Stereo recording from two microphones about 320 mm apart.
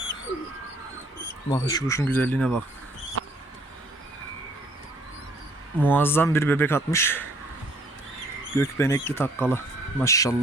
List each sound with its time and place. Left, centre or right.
1.5 s speech: centre
3.2 s basketball bounce: right
5.8 s speech: centre
8.5 s speech: centre